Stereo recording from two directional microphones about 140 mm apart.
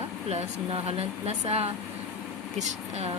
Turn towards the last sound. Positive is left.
turn(degrees=-50)  # may be behind; listen again after turning